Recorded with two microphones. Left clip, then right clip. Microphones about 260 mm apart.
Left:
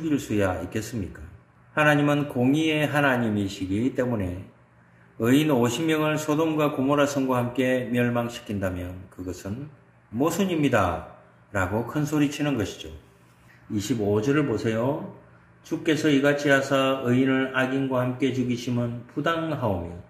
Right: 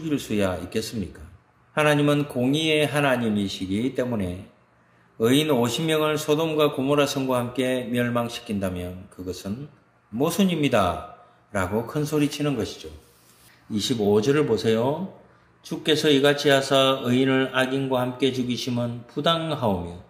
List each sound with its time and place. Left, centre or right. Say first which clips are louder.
0.1 s speech: right 1 dB; right
5.2 s speech: right 1 dB; right
10.1 s speech: right 1 dB; right
13.7 s speech: right 3 dB; right